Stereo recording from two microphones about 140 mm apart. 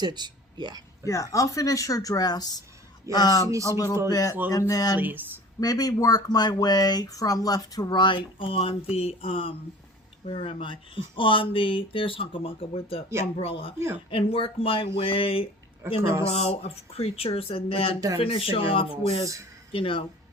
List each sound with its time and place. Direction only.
0.0 s speech: 30° right (ahead or behind)
1.0 s speech: 25° left (ahead or behind)
3.5 s speech: 20° right (ahead or behind)
4.1 s speech: 25° left (ahead or behind)
4.9 s speech: 15° right (ahead or behind)
5.5 s speech: 25° left (ahead or behind)
13.7 s speech: 20° right (ahead or behind)
14.1 s speech: 40° left (ahead or behind)
16.0 s speech: 20° right (ahead or behind)
16.2 s speech: 50° left (ahead or behind)